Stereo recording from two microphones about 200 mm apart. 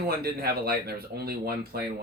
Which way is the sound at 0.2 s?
50° right (ahead or behind).